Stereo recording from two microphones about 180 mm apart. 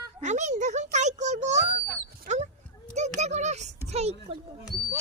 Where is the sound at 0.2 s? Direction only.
40° right (ahead or behind).